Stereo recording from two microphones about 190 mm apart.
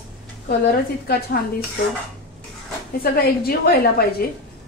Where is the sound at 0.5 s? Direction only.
55° left (ahead or behind).